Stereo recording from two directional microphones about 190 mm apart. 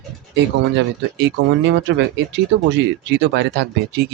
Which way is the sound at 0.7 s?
70° right (ahead or behind).